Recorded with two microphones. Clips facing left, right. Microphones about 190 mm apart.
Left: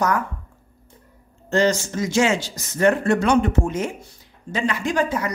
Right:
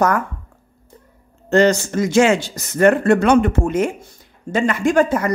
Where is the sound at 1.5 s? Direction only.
60° right (ahead or behind).